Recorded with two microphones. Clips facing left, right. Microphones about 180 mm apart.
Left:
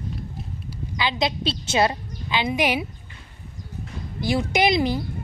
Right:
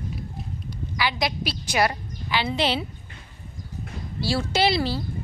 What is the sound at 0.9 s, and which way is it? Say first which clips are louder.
A woman's voice: left 2 dB; 20° left (ahead or behind).